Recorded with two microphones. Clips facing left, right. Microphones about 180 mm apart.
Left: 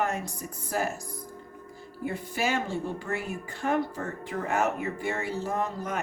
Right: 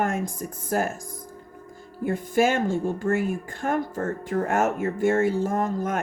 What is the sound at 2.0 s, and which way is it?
A woman's voice, 50° right (ahead or behind).